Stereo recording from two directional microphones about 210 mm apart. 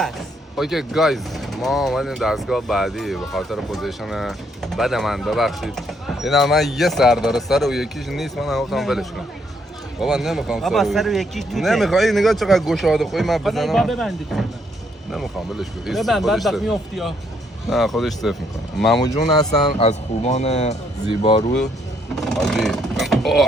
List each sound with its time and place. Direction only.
0.5 s speech: centre (ahead or behind)
19.0 s speech: 20° left (ahead or behind)
19.8 s speech: 30° left (ahead or behind)
22.1 s vehicle: centre (ahead or behind)